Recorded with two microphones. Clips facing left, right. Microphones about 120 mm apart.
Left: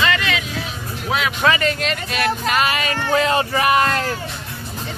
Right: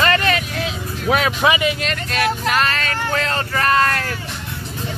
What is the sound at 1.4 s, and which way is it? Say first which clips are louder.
Speech: left 1 dB; 15° right (ahead or behind).